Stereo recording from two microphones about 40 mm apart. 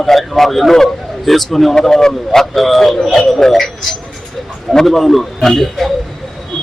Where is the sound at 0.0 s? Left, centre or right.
Centre.